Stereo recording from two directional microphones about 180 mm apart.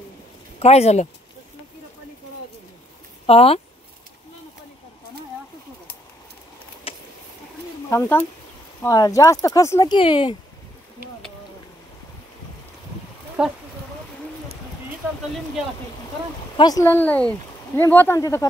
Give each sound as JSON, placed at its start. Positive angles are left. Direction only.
{"t": 0.6, "sound": "speech", "side_deg": 35}
{"t": 3.3, "sound": "speech", "side_deg": 35}
{"t": 6.9, "sound": "vehicle", "side_deg": 30}
{"t": 7.9, "sound": "speech", "side_deg": 10}
{"t": 9.9, "sound": "speech", "side_deg": 30}
{"t": 13.4, "sound": "speech", "side_deg": -5}
{"t": 16.5, "sound": "speech", "side_deg": 20}